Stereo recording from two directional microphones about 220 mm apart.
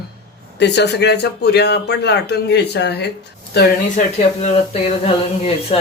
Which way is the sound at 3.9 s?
30° left (ahead or behind).